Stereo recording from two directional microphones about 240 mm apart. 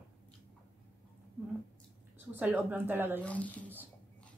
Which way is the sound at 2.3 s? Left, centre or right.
Centre.